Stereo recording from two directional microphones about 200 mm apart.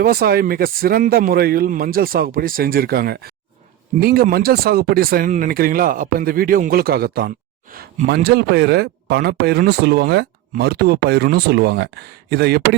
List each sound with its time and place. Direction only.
0.0 s speech: 50° right (ahead or behind)